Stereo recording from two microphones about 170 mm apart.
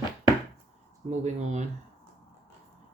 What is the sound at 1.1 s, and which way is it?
Speech, 40° right (ahead or behind).